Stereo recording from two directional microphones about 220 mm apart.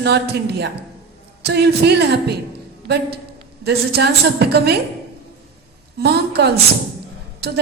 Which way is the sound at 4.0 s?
50° right (ahead or behind).